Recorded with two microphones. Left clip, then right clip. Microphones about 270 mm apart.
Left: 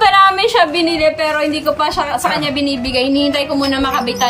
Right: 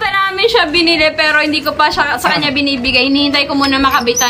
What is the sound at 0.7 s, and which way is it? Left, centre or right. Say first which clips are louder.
A woman's voice: right 3 dB; centre.